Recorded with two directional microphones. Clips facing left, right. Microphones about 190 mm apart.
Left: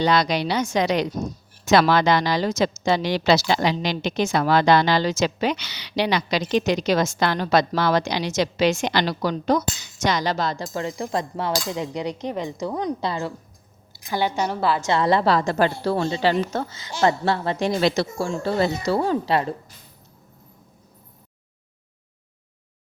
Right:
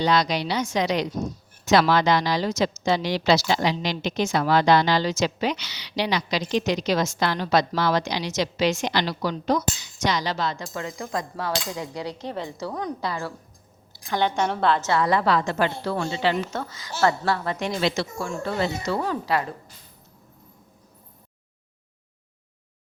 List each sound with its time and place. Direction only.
0.0 s a woman's voice: 55° left (ahead or behind); by 13.3 s 25° left (ahead or behind)
13.9 s a woman's voice: 10° left (ahead or behind)
14.8 s a woman's voice: 25° left (ahead or behind)